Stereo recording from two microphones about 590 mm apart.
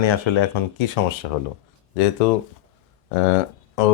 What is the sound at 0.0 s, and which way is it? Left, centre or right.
Speech, left.